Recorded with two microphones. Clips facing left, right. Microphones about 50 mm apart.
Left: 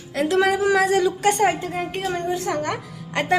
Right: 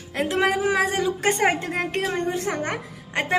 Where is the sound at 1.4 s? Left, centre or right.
Right.